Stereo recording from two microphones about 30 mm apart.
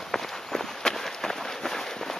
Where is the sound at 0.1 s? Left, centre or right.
Centre.